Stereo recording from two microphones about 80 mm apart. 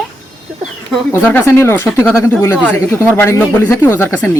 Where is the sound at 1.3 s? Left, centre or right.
Left.